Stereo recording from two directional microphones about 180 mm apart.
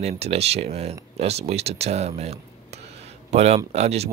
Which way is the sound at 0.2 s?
35° right (ahead or behind).